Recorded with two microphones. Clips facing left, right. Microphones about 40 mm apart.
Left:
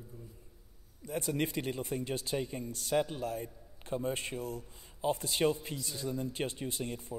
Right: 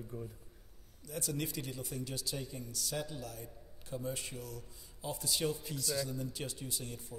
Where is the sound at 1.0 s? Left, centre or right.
Left.